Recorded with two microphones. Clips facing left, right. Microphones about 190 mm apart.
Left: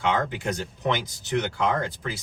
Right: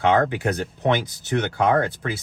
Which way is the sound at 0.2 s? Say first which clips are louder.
Right 6 dB; 65° right (ahead or behind).